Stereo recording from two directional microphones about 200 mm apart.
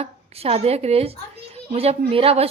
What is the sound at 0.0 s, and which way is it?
A woman's voice, 30° right (ahead or behind).